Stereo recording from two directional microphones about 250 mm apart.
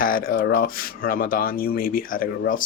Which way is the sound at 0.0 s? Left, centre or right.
Left.